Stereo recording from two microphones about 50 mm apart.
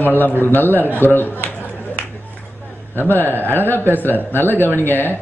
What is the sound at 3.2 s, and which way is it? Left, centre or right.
Speech, right.